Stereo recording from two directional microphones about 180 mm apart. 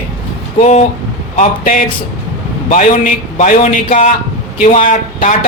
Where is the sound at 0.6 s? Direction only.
40° left (ahead or behind).